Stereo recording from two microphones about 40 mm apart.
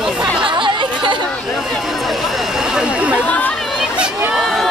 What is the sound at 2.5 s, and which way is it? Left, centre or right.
Chatter, centre.